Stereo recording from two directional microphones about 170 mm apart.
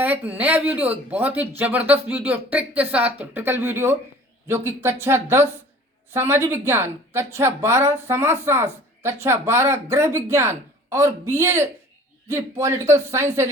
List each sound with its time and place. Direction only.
0.0 s speech: 10° right (ahead or behind)